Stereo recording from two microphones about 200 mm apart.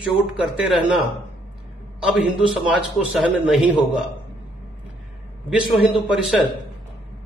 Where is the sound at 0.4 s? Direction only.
5° right (ahead or behind).